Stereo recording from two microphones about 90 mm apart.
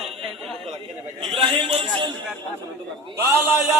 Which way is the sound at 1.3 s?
80° right.